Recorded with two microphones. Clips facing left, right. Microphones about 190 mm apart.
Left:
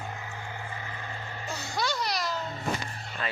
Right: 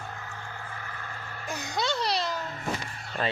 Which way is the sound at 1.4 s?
15° right (ahead or behind).